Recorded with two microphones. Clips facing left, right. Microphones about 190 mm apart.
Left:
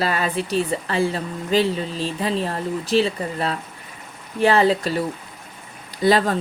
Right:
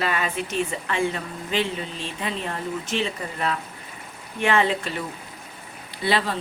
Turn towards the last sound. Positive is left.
turn(degrees=45)  # may be behind; listen again after turning